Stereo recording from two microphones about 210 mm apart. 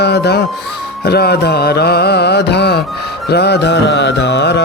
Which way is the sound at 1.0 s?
50° left (ahead or behind).